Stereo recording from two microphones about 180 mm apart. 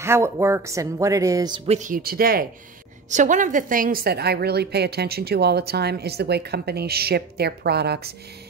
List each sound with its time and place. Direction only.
0.0 s speech: 15° right (ahead or behind)
1.7 s speech: 45° right (ahead or behind)
3.1 s a woman's voice: 45° right (ahead or behind); by 8.1 s 65° right (ahead or behind)